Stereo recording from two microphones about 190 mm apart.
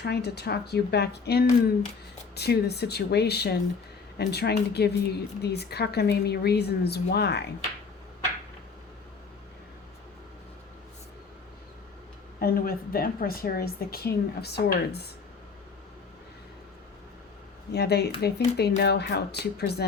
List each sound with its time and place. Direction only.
0.0 s a woman's voice: 60° left (ahead or behind)
12.4 s a woman's voice: 50° left (ahead or behind)
17.7 s a woman's voice: 60° left (ahead or behind)